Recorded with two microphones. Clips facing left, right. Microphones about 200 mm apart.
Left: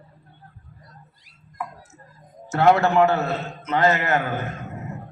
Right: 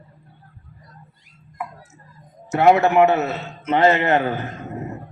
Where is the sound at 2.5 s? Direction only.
15° right (ahead or behind).